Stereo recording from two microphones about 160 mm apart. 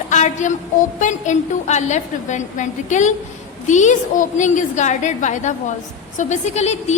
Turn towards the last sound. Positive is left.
turn(degrees=45)  # may be behind; listen again after turning